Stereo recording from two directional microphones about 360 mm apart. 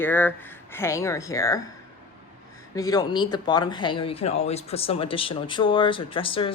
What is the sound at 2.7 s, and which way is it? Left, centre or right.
A woman's voice, centre.